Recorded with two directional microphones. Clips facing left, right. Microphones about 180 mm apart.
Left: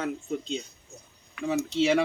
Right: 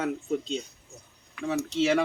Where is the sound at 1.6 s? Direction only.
10° left (ahead or behind).